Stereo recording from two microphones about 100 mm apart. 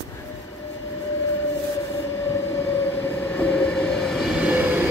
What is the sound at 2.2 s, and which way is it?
Train, 25° left (ahead or behind).